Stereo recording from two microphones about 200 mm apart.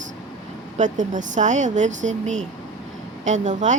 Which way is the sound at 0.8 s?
40° right (ahead or behind).